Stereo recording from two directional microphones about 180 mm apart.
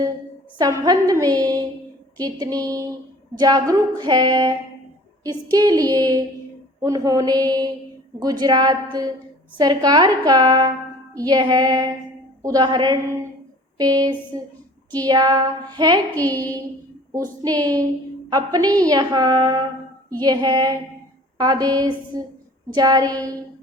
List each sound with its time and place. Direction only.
0.6 s a woman's voice: 20° right (ahead or behind)
16.1 s a woman's voice: 10° left (ahead or behind)
17.1 s a woman's voice: 20° right (ahead or behind)